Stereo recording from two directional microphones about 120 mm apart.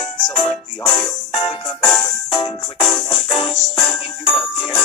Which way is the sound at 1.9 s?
Centre (ahead or behind).